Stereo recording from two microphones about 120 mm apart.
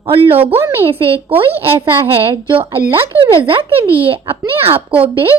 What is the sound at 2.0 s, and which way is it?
A woman's voice, 50° right (ahead or behind).